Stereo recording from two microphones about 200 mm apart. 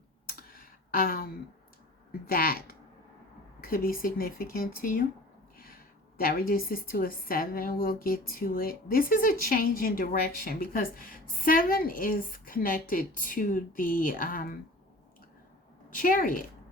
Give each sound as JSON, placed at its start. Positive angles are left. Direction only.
{"t": 0.3, "sound": "a sound", "side_deg": 45}
{"t": 2.2, "sound": "a woman's voice", "side_deg": 45}
{"t": 16.0, "sound": "a woman's voice", "side_deg": 45}